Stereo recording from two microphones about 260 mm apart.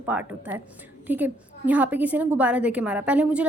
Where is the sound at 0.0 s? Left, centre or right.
Centre.